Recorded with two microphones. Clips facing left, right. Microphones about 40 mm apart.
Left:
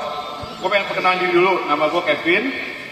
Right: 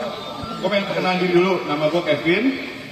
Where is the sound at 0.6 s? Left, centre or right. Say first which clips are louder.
Left 3 dB; centre.